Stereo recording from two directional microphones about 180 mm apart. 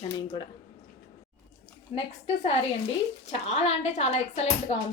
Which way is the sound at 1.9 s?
30° left (ahead or behind).